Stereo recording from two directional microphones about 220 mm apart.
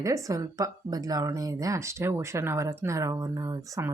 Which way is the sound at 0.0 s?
15° right (ahead or behind).